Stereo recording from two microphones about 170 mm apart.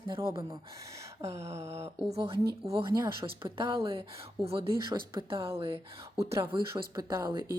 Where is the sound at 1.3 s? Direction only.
15° right (ahead or behind).